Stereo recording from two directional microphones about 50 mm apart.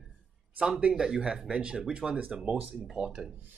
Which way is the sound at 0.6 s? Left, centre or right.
Right.